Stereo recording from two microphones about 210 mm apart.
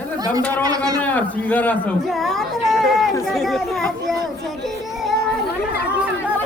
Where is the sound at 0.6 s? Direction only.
15° right (ahead or behind).